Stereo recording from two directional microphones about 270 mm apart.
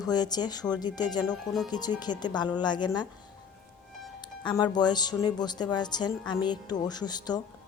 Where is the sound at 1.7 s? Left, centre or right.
Centre.